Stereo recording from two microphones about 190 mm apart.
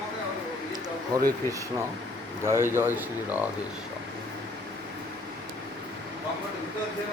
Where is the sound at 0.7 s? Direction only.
20° right (ahead or behind).